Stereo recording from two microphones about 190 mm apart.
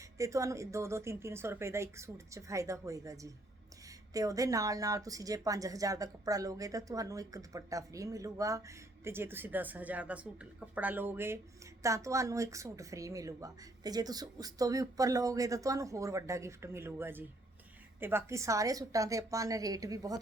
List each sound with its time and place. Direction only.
0.2 s speech: 15° right (ahead or behind)